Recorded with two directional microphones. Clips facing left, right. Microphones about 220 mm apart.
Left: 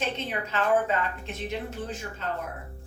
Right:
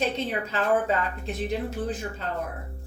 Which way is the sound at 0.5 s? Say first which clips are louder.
Even; 35° right (ahead or behind).